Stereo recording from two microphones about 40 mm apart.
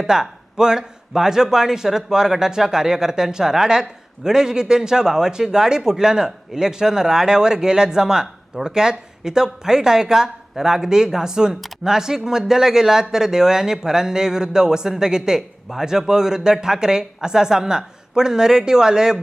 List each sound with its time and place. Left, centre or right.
0.0 s a man's voice: centre